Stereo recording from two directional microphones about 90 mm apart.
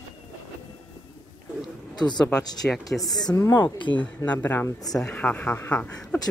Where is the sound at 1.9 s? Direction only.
55° left (ahead or behind).